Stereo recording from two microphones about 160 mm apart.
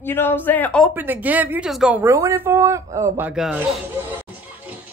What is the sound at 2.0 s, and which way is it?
Speech, 20° right (ahead or behind).